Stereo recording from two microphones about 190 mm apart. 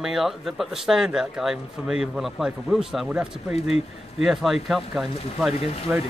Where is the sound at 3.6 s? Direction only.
35° left (ahead or behind).